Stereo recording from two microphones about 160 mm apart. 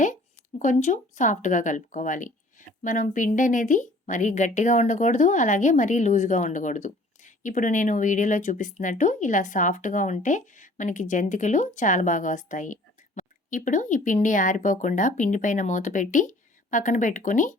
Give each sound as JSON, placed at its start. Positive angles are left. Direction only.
{"t": 0.6, "sound": "speech", "side_deg": 50}